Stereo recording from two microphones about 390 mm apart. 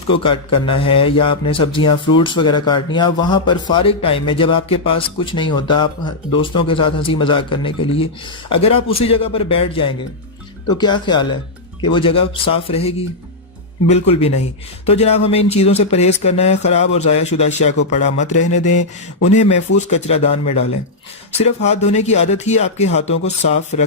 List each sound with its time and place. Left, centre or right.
0.1 s speech: centre
21.3 s speech: centre